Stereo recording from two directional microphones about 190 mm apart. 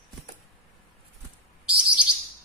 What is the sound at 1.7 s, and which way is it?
Bird, 5° right (ahead or behind).